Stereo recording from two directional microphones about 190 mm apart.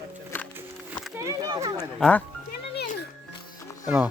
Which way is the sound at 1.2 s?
20° right (ahead or behind).